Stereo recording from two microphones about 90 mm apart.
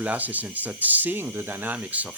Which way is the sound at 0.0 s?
15° right (ahead or behind).